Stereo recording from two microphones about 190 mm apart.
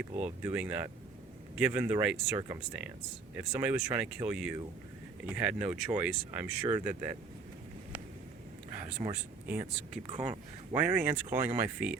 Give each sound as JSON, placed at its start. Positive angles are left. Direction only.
{"t": 0.0, "sound": "speech", "side_deg": -10}
{"t": 9.5, "sound": "speech", "side_deg": -10}
{"t": 10.1, "sound": "speech", "side_deg": -30}
{"t": 10.7, "sound": "speech", "side_deg": -10}